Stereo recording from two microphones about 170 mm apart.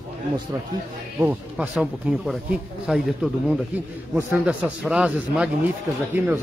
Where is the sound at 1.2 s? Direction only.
10° right (ahead or behind).